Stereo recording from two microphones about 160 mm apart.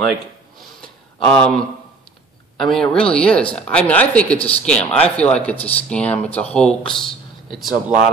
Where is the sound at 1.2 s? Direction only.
5° left (ahead or behind).